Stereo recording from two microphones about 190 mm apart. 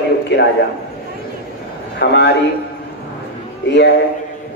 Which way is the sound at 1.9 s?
60° left (ahead or behind).